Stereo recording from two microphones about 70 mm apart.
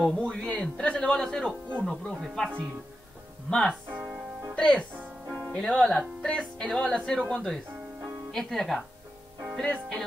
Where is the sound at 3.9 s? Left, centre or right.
Centre.